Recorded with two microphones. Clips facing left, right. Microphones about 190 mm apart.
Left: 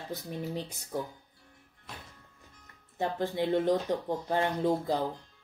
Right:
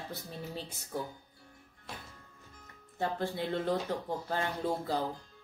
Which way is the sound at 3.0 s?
20° left (ahead or behind).